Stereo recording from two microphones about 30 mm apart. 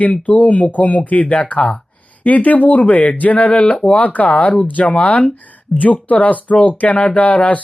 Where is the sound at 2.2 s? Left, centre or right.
Left.